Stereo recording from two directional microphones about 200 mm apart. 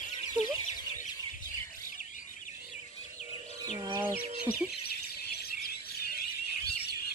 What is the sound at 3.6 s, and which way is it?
Bird, 15° right (ahead or behind).